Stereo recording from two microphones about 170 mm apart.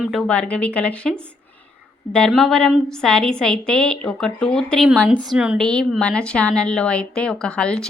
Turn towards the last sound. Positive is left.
turn(degrees=5)  # may be behind; listen again after turning